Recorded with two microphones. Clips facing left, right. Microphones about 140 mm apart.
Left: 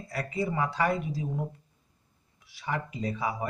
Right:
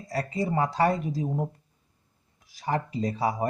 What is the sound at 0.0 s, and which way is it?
A man's voice, 35° right (ahead or behind).